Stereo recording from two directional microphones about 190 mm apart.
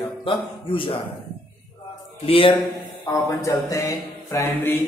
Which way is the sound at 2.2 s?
30° left (ahead or behind).